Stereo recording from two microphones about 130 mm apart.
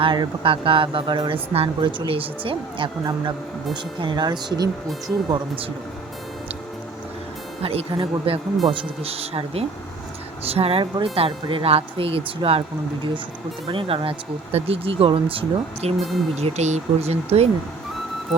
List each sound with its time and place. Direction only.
0.0 s a woman's voice: 40° right (ahead or behind)
7.6 s speech: 50° right (ahead or behind)
13.7 s speech: 45° right (ahead or behind)
16.0 s speech: centre (ahead or behind)
16.4 s speech: 55° right (ahead or behind)